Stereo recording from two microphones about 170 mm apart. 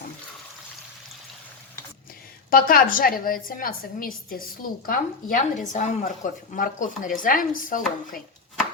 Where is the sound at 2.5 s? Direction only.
55° left (ahead or behind).